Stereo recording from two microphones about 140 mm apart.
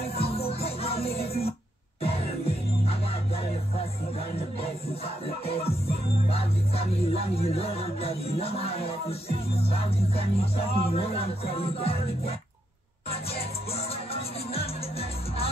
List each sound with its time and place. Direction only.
0.0 s music: 45° left (ahead or behind)
4.6 s music: 45° left (ahead or behind)